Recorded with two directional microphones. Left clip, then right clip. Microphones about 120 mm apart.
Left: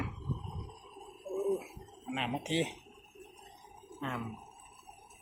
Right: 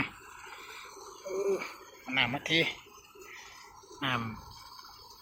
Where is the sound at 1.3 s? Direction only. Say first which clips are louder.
Right 3 dB; 20° right (ahead or behind).